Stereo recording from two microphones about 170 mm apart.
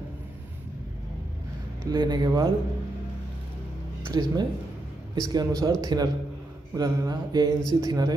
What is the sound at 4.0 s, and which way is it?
A man's voice, 25° right (ahead or behind).